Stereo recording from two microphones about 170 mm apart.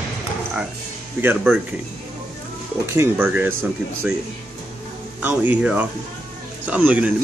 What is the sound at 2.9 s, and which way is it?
Speech, 15° right (ahead or behind).